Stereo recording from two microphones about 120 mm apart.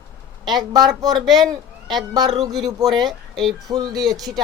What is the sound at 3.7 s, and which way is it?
Speech, 35° right (ahead or behind).